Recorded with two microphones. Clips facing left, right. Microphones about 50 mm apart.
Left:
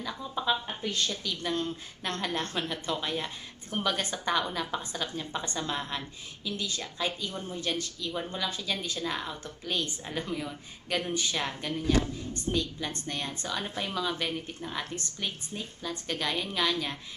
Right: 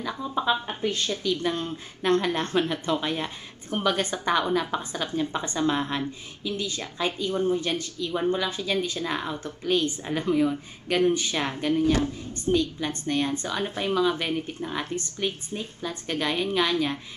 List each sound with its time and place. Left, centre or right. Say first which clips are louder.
0.0 s a woman's voice: right 5 dB; centre
6.5 s a woman's voice: right 4 dB; centre
6.8 s speech: right 5 dB; centre
7.6 s a woman's voice: right 4 dB; centre